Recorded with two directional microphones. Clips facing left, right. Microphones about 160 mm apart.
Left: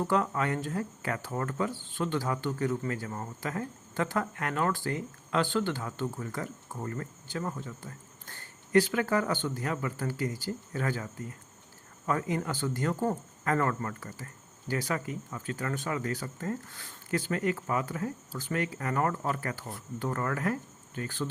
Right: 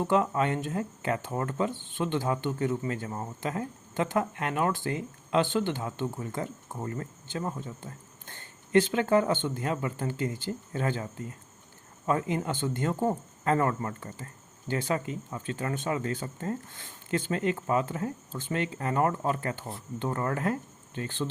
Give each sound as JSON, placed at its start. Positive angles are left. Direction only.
{"t": 0.0, "sound": "speech", "side_deg": -20}